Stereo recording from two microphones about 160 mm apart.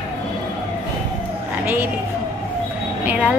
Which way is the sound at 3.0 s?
10° right (ahead or behind).